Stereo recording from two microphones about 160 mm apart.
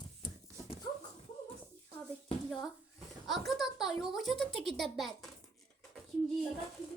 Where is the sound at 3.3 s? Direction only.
Centre (ahead or behind).